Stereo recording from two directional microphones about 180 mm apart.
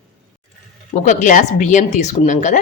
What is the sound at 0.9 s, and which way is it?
Speech, 45° left (ahead or behind).